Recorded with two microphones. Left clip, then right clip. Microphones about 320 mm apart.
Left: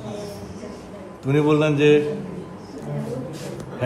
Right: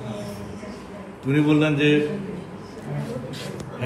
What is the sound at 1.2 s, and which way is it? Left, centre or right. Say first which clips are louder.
Speech: left 2 dB; centre.